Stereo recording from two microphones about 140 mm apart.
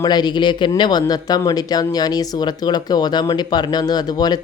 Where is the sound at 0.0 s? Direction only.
30° left (ahead or behind).